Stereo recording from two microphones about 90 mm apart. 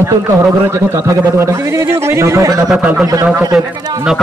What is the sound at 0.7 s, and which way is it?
Speech, 30° right (ahead or behind).